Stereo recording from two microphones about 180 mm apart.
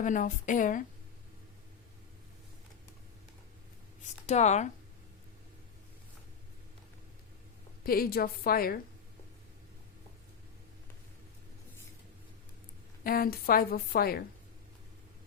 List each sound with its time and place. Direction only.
0.0 s a woman's voice: 45° left (ahead or behind)
4.3 s speech: 40° left (ahead or behind)
7.9 s a woman's voice: 55° left (ahead or behind)
13.1 s a woman's voice: 55° left (ahead or behind)